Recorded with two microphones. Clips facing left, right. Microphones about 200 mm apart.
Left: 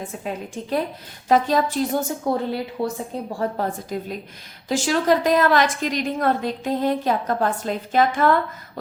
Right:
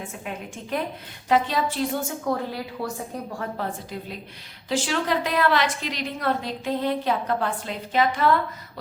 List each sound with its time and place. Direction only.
0.3 s a woman's voice: 35° left (ahead or behind)
2.8 s speech: 20° left (ahead or behind)
3.6 s a woman's voice: 45° left (ahead or behind)